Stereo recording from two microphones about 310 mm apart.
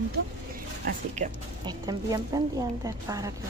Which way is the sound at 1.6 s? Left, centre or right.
Centre.